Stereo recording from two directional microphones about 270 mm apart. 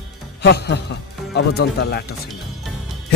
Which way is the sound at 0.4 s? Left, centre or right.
Left.